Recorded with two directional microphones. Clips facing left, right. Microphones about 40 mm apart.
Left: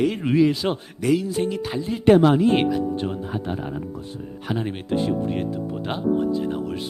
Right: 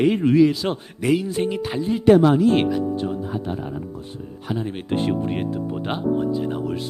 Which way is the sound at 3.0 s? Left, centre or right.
Left.